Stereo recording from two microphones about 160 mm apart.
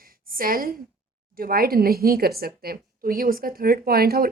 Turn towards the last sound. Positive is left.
turn(degrees=-70)  # may be behind; listen again after turning